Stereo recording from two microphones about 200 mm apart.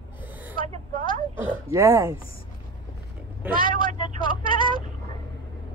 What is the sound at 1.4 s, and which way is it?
Speech, 15° right (ahead or behind).